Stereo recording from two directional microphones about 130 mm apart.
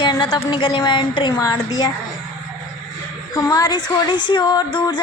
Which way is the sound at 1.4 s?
25° left (ahead or behind).